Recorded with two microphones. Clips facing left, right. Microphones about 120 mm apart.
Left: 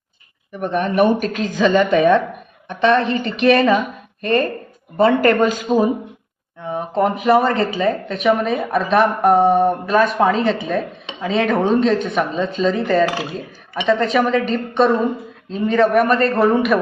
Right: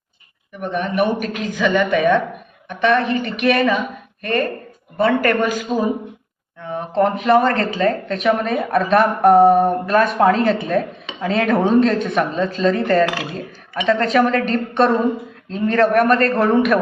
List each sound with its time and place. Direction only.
0.6 s a woman's voice: 35° left (ahead or behind)
6.7 s speech: 10° left (ahead or behind)